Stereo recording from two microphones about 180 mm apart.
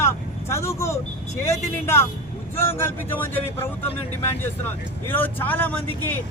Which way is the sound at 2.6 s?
15° left (ahead or behind).